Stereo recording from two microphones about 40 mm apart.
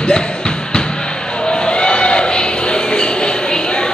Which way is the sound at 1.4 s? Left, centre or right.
Centre.